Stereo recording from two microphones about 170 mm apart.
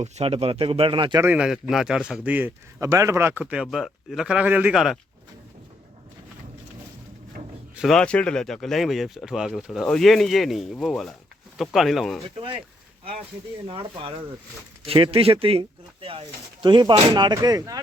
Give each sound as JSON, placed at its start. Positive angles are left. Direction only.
{"t": 0.0, "sound": "speech", "side_deg": -35}
{"t": 1.2, "sound": "a man's voice", "side_deg": -5}
{"t": 7.8, "sound": "speech", "side_deg": 0}
{"t": 13.7, "sound": "speech", "side_deg": -30}